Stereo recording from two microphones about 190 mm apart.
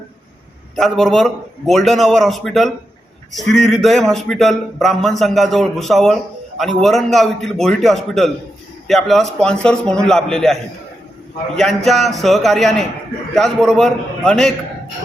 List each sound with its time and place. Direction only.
0.8 s speech: centre (ahead or behind)